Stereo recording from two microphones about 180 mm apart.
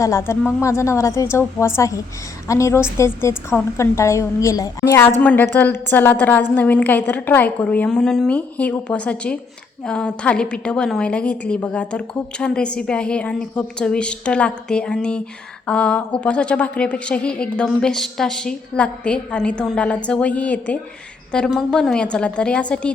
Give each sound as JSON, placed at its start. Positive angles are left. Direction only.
{"t": 0.0, "sound": "a woman's voice", "side_deg": 15}